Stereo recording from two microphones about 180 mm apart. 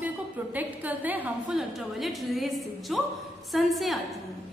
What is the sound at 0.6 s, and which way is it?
A woman's voice, 10° right (ahead or behind).